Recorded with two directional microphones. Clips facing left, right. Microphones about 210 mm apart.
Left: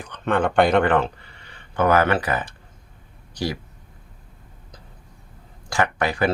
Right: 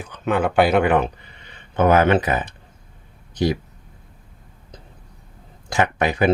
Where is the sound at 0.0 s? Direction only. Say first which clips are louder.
Right 1 dB; 5° right (ahead or behind).